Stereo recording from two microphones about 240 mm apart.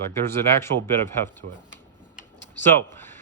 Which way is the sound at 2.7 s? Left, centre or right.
Centre.